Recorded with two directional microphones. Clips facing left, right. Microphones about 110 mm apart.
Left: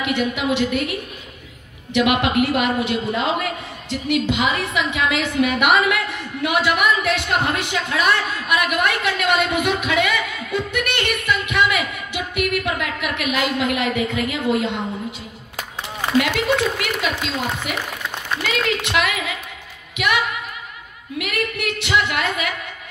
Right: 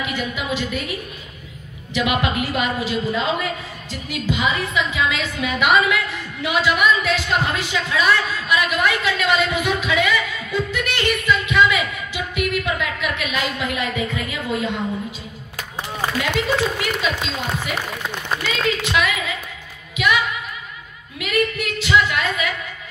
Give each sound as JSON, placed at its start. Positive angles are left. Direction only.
{"t": 0.0, "sound": "a woman's voice", "side_deg": 65}
{"t": 2.0, "sound": "a woman's voice", "side_deg": 65}
{"t": 16.7, "sound": "a woman's voice", "side_deg": 60}